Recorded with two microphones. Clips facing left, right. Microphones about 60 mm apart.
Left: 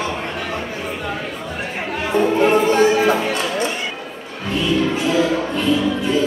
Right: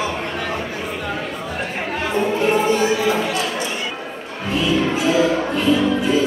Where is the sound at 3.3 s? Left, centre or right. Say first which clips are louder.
Left 1 dB; centre.